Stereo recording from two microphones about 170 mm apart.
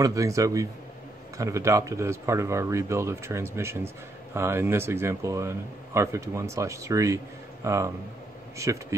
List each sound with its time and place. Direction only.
0.0 s a man's voice: 20° right (ahead or behind)